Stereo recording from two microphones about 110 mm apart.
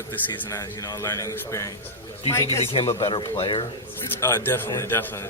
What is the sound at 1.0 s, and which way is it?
A man's voice, 30° left (ahead or behind).